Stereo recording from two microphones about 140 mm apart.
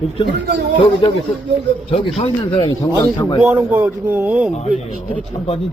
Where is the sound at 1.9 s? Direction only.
45° left (ahead or behind).